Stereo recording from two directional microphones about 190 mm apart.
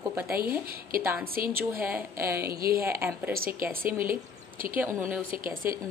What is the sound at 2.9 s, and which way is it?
Speech, 10° right (ahead or behind).